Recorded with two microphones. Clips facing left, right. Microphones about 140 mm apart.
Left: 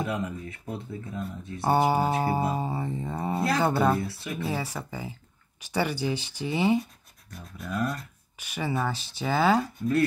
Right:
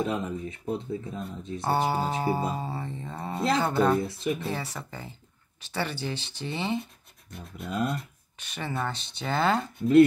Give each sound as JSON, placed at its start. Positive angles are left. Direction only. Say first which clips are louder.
{"t": 0.0, "sound": "speech", "louder": "right 2 dB", "side_deg": -20}
{"t": 1.6, "sound": "speech", "louder": "left 3 dB", "side_deg": 15}
{"t": 4.0, "sound": "speech", "louder": "right 5 dB", "side_deg": -20}
{"t": 4.5, "sound": "speech", "louder": "left 2 dB", "side_deg": 10}
{"t": 7.2, "sound": "speech", "louder": "right 1 dB", "side_deg": -25}
{"t": 8.4, "sound": "speech", "louder": "left 3 dB", "side_deg": 10}